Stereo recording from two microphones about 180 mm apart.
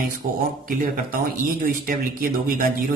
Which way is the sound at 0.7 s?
50° right (ahead or behind).